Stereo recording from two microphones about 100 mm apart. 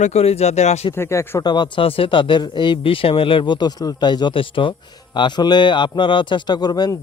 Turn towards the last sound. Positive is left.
turn(degrees=45)  # may be behind; listen again after turning